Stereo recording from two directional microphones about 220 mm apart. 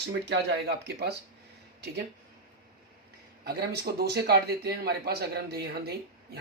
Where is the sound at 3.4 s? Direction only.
45° right (ahead or behind).